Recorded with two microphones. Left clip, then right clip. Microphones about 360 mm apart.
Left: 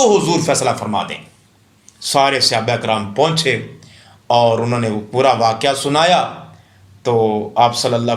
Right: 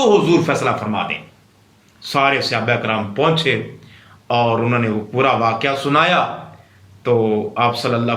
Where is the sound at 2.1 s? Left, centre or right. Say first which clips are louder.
Left 3 dB; centre.